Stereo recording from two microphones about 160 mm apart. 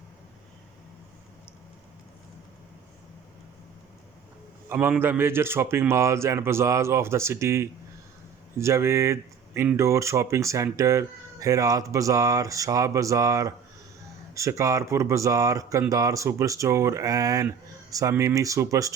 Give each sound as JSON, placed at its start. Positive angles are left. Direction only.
{"t": 4.7, "sound": "speech", "side_deg": -10}